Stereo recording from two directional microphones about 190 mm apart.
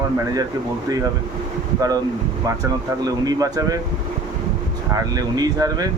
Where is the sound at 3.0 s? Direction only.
20° right (ahead or behind).